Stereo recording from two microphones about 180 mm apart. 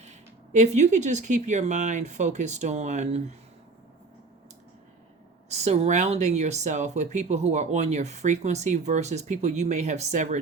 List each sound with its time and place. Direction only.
0.0 s speech: 40° right (ahead or behind)
5.5 s speech: 40° right (ahead or behind)